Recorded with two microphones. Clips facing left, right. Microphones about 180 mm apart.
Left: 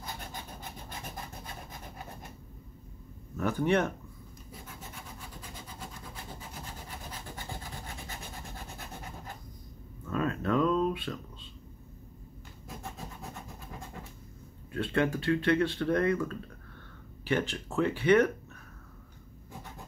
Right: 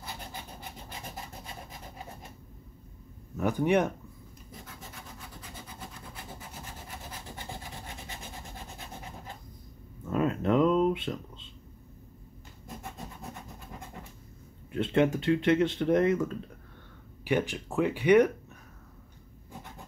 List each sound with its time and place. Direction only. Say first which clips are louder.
3.3 s speech: right 2 dB; 15° right (ahead or behind)
10.0 s a sound: right 3 dB; 20° right (ahead or behind)
14.7 s speech: right 4 dB; 20° right (ahead or behind)